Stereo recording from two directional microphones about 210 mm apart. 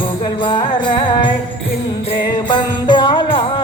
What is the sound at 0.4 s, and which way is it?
Music, 20° left (ahead or behind).